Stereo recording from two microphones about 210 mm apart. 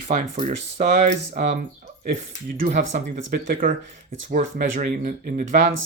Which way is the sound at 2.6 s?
45° right (ahead or behind).